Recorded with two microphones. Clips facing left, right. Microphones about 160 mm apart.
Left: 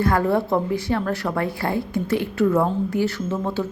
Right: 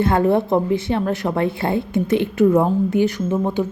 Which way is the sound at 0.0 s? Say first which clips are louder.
Right 3 dB; 25° right (ahead or behind).